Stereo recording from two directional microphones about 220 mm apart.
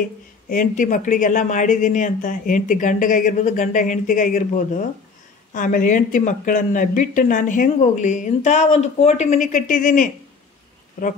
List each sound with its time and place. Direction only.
0.5 s speech: 35° left (ahead or behind)
5.5 s speech: 35° left (ahead or behind)